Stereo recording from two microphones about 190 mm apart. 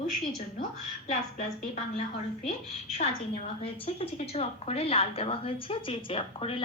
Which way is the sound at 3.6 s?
30° left (ahead or behind).